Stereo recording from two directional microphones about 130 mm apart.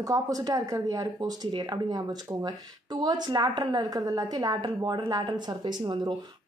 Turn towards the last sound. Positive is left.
turn(degrees=-35)  # may be behind; listen again after turning